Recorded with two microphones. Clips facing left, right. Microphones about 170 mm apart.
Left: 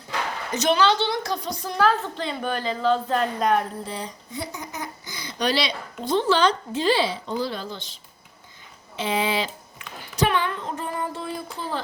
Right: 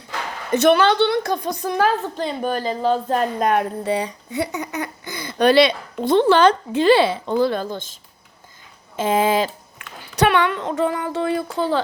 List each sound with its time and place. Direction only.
0.5 s a woman's voice: 60° right (ahead or behind)
9.0 s speech: 45° right (ahead or behind)
10.2 s speech: 70° right (ahead or behind); by 11.8 s 85° right